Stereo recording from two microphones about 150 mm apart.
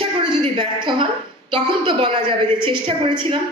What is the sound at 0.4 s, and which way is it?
A woman's voice, 35° right (ahead or behind).